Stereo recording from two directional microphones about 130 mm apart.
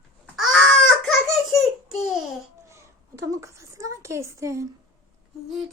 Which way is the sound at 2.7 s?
25° right (ahead or behind).